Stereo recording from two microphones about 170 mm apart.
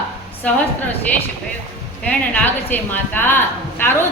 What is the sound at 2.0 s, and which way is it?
A woman's voice, 10° left (ahead or behind).